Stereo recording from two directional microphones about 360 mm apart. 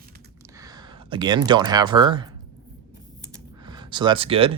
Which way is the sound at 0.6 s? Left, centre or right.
Centre.